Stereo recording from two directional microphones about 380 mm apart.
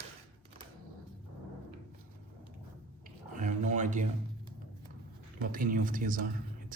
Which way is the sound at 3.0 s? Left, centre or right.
Centre.